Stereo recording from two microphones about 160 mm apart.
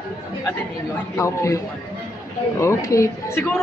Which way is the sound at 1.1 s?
20° left (ahead or behind).